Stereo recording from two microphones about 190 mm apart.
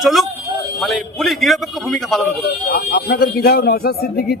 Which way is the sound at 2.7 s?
55° left (ahead or behind).